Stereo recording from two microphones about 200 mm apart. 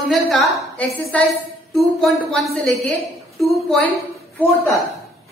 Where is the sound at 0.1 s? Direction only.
Centre (ahead or behind).